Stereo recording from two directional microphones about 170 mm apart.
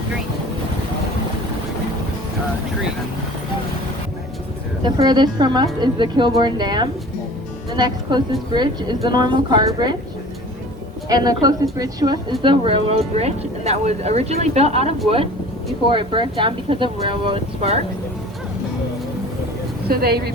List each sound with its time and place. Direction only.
4.8 s a woman's voice: 25° right (ahead or behind)
11.1 s a woman's voice: 20° right (ahead or behind)
19.9 s speech: 65° right (ahead or behind)